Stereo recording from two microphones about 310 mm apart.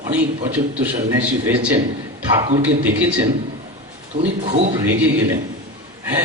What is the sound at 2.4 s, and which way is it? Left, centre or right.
Speech, centre.